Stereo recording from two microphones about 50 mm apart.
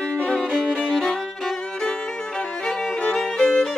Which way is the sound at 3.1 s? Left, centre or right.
Centre.